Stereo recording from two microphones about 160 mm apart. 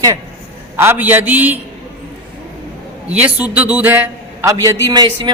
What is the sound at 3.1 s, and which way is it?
A man's voice, 10° right (ahead or behind).